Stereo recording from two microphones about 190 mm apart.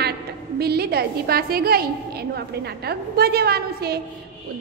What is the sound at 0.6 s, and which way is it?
A woman's voice, 55° right (ahead or behind).